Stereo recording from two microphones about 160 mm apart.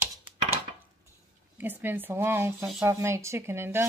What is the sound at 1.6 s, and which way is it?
Speech, 10° right (ahead or behind).